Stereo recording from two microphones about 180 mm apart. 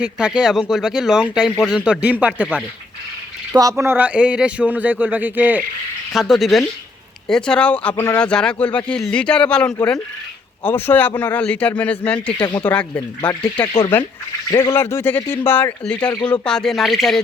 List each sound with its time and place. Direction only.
0.0 s a man's voice: 5° right (ahead or behind)
3.5 s a man's voice: 20° right (ahead or behind); by 12.3 s 5° left (ahead or behind)
12.4 s speech: 25° left (ahead or behind)
12.6 s speech: 5° left (ahead or behind)
14.5 s speech: 25° left (ahead or behind); by 17.2 s centre (ahead or behind)